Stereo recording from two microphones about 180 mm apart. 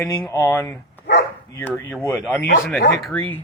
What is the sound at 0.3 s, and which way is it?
Speech, 15° left (ahead or behind).